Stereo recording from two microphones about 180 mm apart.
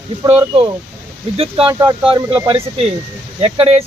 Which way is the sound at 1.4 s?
30° right (ahead or behind).